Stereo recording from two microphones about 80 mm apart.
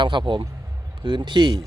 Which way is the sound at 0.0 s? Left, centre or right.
Right.